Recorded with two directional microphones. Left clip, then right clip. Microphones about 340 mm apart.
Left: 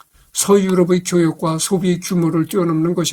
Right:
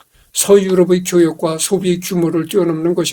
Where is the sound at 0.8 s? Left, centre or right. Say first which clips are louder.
Right 4 dB; left.